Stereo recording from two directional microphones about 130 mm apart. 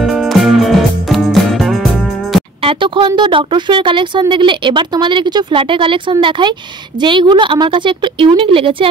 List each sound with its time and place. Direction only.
0.0 s music: centre (ahead or behind)
2.6 s speech: 40° right (ahead or behind)